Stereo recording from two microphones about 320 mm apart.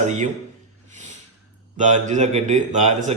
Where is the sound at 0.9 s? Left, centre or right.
Right.